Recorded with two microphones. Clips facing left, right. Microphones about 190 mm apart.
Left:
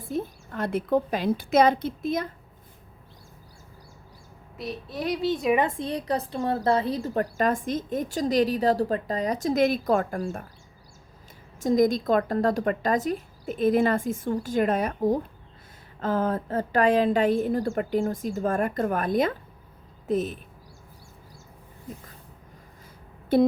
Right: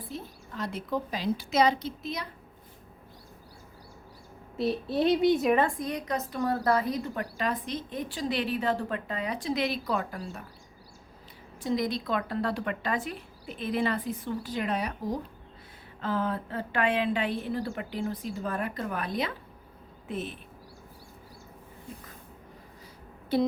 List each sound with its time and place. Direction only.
0.0 s a woman's voice: 50° left (ahead or behind)
4.5 s speech: 30° right (ahead or behind)
5.5 s a woman's voice: 25° left (ahead or behind)
7.0 s speech: 45° left (ahead or behind)
11.6 s speech: 45° left (ahead or behind)
23.3 s speech: 50° left (ahead or behind)